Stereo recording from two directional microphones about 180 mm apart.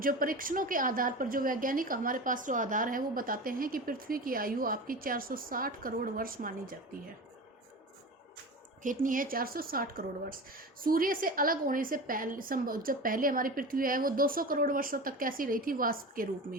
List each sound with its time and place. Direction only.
0.0 s speech: 50° right (ahead or behind)
8.8 s speech: 50° right (ahead or behind)